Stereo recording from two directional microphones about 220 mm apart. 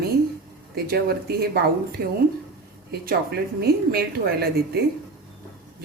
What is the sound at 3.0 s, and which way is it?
Speech, 45° right (ahead or behind).